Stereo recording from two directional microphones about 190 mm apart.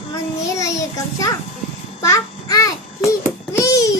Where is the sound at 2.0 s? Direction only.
15° left (ahead or behind).